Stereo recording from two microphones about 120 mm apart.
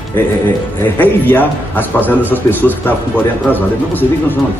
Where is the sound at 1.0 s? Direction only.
15° left (ahead or behind).